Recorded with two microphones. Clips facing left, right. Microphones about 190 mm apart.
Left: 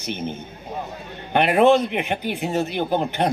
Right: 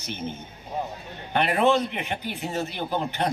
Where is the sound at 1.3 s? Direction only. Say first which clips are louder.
Left 6 dB; 60° left (ahead or behind).